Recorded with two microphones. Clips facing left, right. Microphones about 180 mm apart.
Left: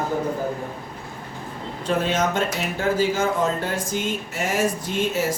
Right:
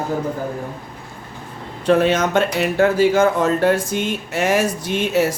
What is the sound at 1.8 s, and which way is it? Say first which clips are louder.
Speech: right 7 dB; 70° right (ahead or behind).